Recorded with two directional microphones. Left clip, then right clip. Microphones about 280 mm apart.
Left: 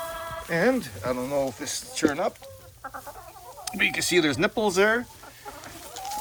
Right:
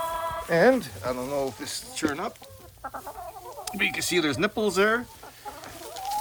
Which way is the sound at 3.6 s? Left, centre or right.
Centre.